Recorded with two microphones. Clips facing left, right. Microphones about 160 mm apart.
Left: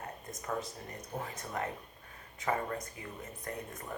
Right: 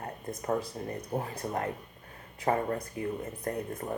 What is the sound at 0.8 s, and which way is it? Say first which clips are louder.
Speech: right 7 dB; 40° right (ahead or behind).